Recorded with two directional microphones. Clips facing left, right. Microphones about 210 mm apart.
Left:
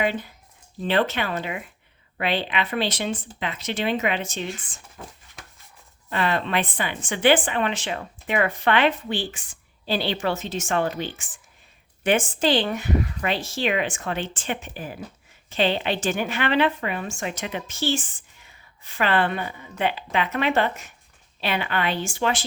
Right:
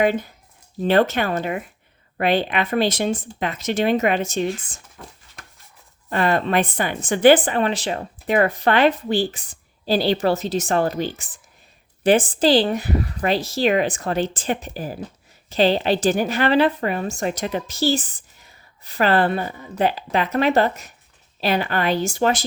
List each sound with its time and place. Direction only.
0.0 s speech: 45° right (ahead or behind)
6.1 s a woman's voice: 45° right (ahead or behind)